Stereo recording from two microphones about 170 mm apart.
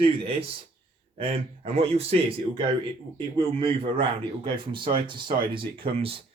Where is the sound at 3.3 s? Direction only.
30° right (ahead or behind).